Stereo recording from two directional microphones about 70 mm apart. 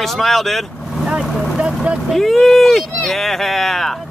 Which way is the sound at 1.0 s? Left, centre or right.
Centre.